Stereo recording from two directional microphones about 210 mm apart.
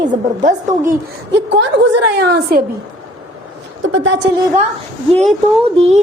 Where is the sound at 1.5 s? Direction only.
55° right (ahead or behind).